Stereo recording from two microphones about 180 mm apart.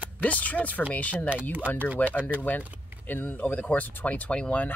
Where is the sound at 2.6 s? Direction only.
10° right (ahead or behind).